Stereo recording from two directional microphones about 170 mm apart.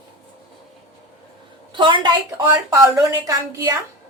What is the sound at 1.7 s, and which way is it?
A woman's voice, 30° right (ahead or behind).